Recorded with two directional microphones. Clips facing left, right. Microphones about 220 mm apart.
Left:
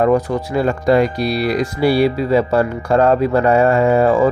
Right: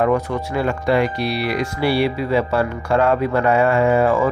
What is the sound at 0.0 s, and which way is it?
Speech, 35° left (ahead or behind).